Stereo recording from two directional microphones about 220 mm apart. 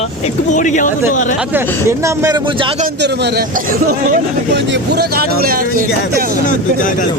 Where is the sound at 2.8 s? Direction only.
50° right (ahead or behind).